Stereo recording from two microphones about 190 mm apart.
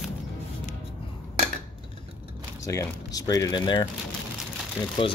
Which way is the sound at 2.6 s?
20° left (ahead or behind).